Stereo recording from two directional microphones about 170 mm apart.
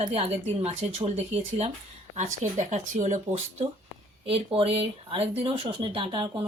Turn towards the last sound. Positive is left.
turn(degrees=-30)  # may be behind; listen again after turning